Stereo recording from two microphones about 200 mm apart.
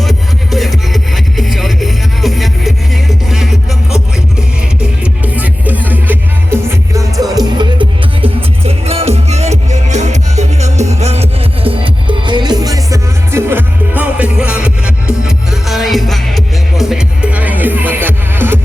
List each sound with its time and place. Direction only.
0.0 s music: centre (ahead or behind)
4.8 s music: 10° right (ahead or behind)